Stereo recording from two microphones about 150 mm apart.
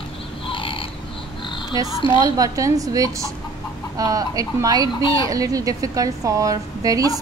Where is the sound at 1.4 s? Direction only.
30° left (ahead or behind).